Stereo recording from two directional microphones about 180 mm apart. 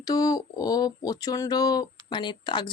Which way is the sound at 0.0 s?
20° left (ahead or behind).